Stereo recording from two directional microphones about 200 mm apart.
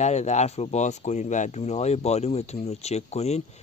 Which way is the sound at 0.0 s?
35° left (ahead or behind).